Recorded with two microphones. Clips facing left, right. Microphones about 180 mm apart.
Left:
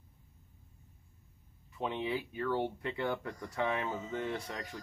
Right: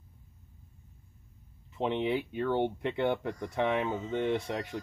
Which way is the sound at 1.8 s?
25° right (ahead or behind).